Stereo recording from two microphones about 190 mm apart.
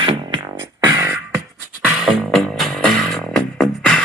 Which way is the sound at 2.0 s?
Centre (ahead or behind).